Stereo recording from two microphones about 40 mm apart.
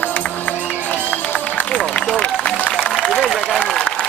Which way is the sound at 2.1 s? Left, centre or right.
Left.